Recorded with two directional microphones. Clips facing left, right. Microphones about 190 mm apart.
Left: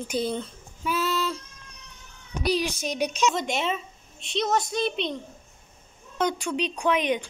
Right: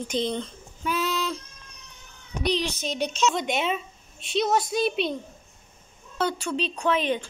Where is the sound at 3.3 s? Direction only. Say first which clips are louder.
Right 1 dB; centre (ahead or behind).